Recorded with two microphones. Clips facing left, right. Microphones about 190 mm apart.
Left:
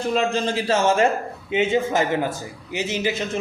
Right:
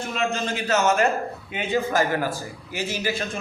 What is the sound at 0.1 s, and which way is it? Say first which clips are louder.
A man's voice: left 5 dB; 35° left (ahead or behind).